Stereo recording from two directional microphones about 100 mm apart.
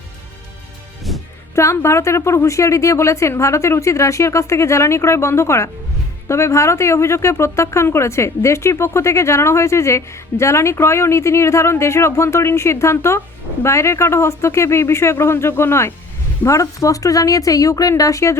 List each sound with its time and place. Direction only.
1.1 s music: centre (ahead or behind)
1.5 s speech: 25° left (ahead or behind)